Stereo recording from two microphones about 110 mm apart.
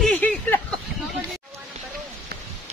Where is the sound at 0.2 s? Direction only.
15° left (ahead or behind).